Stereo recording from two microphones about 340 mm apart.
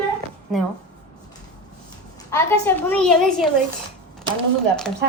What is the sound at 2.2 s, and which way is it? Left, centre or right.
Speech, centre.